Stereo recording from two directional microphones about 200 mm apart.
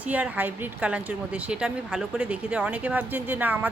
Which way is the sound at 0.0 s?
5° right (ahead or behind).